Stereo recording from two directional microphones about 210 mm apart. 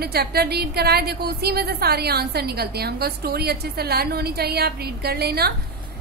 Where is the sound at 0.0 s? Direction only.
50° right (ahead or behind).